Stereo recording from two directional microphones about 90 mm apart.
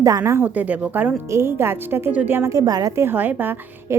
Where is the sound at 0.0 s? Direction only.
40° right (ahead or behind).